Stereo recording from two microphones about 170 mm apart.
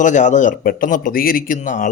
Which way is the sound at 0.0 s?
45° left (ahead or behind).